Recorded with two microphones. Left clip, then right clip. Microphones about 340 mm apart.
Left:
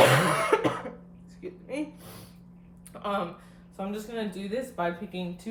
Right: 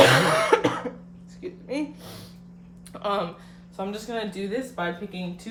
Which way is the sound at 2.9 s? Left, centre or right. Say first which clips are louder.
Right 5 dB; right.